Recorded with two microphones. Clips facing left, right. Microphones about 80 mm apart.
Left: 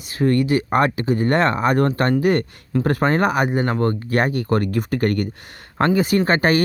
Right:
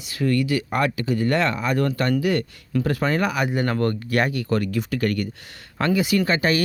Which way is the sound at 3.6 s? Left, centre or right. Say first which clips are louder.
Left 2 dB; left.